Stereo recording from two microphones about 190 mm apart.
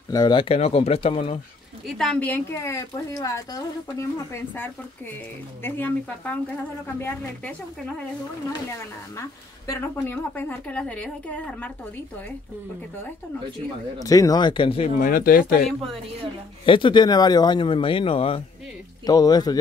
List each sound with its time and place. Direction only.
0.1 s speech: 20° left (ahead or behind)
1.9 s a woman's voice: centre (ahead or behind)
8.6 s a woman's voice: 15° left (ahead or behind)
13.9 s speech: 20° left (ahead or behind)
15.0 s speech: 50° left (ahead or behind)
16.6 s speech: 25° left (ahead or behind)